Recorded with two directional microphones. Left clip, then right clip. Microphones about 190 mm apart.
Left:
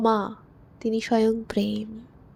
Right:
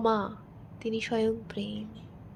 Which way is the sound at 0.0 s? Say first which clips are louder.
Left 5 dB; 40° left (ahead or behind).